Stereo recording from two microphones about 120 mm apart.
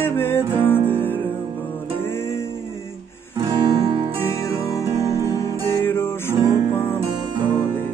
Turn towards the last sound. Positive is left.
turn(degrees=20)  # may be behind; listen again after turning